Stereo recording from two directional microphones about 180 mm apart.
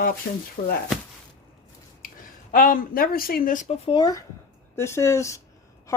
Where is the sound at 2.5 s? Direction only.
50° left (ahead or behind).